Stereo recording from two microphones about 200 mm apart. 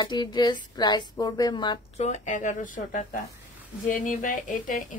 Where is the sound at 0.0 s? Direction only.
20° left (ahead or behind).